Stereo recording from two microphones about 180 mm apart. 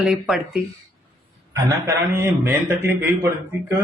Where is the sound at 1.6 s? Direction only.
15° right (ahead or behind).